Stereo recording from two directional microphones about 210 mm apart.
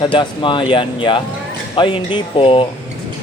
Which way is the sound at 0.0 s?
25° left (ahead or behind).